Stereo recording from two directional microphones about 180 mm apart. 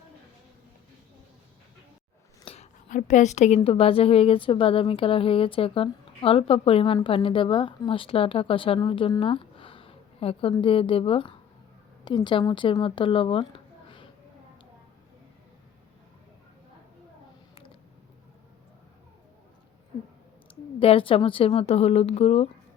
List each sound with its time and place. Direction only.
2.4 s a sound: 30° left (ahead or behind)
2.9 s a woman's voice: 45° left (ahead or behind); by 14.1 s 25° left (ahead or behind)
20.7 s a woman's voice: 30° left (ahead or behind)